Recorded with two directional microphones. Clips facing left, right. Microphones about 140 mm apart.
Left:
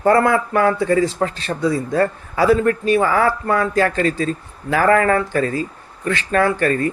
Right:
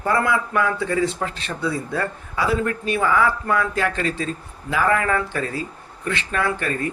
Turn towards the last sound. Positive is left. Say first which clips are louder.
# left 7 dB
turn(degrees=40)  # may be behind; listen again after turning